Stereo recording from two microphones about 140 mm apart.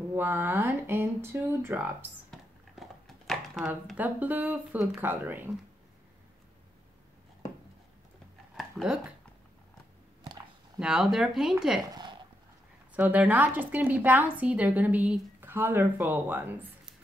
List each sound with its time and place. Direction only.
0.1 s a woman's voice: 15° right (ahead or behind)
2.3 s a sound: centre (ahead or behind)
3.9 s a woman's voice: 10° right (ahead or behind)
8.5 s speech: 5° right (ahead or behind)
10.8 s speech: 5° right (ahead or behind)
11.9 s a sound: 30° right (ahead or behind)
12.9 s a woman's voice: 10° right (ahead or behind)